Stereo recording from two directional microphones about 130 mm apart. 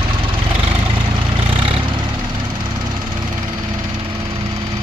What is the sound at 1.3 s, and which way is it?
Vehicle, 45° right (ahead or behind).